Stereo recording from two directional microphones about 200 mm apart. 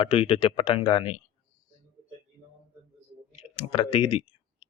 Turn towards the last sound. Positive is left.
turn(degrees=30)  # may be behind; listen again after turning